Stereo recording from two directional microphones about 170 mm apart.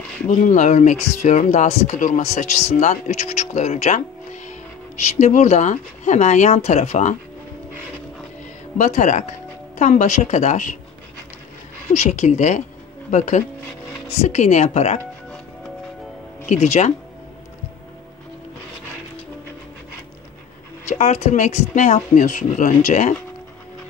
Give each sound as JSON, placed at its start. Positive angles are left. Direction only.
{"t": 0.3, "sound": "speech", "side_deg": 45}
{"t": 8.7, "sound": "speech", "side_deg": 45}
{"t": 11.9, "sound": "speech", "side_deg": 40}
{"t": 16.4, "sound": "speech", "side_deg": 40}
{"t": 20.9, "sound": "speech", "side_deg": 40}